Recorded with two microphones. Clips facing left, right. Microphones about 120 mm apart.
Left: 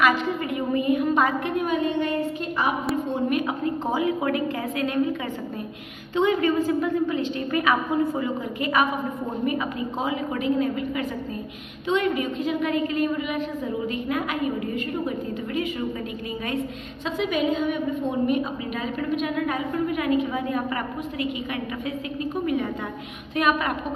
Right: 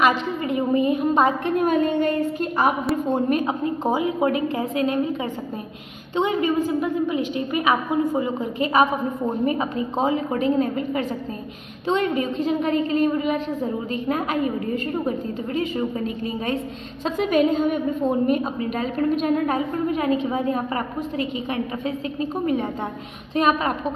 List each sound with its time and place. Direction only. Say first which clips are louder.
0.0 s a sound: right 1 dB; 25° right (ahead or behind)
1.6 s a woman's voice: right 5 dB; 45° right (ahead or behind)
3.4 s a woman's voice: right 3 dB; 20° right (ahead or behind)
6.1 s a woman's voice: even; 15° right (ahead or behind)
9.5 s a woman's voice: right 3 dB; 30° right (ahead or behind)
17.0 s a woman's voice: right 5 dB; 45° right (ahead or behind)